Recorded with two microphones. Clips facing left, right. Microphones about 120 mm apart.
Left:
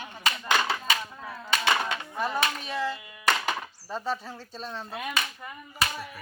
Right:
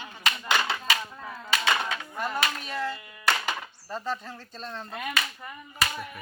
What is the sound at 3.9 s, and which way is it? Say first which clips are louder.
Speech: left 1 dB; 5° left (ahead or behind).